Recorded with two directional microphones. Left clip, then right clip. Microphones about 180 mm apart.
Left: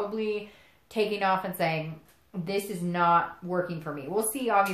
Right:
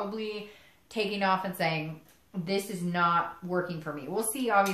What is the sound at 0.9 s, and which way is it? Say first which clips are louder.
A woman's voice: left 2 dB; 35° left (ahead or behind).